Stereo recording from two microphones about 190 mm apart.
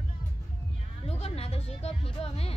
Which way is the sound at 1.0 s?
30° left (ahead or behind).